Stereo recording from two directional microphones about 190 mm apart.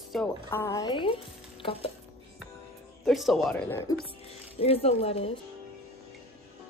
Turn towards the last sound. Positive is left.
turn(degrees=30)  # may be behind; listen again after turning